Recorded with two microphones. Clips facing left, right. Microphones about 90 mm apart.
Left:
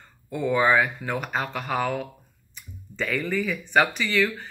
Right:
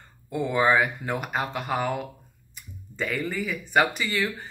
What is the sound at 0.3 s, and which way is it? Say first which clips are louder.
Speech: left 1 dB; 15° right (ahead or behind).